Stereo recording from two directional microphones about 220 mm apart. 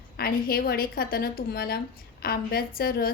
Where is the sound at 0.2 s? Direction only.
45° left (ahead or behind).